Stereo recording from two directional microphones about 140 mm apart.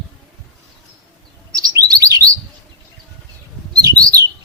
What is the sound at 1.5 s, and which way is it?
Chirp, 25° right (ahead or behind).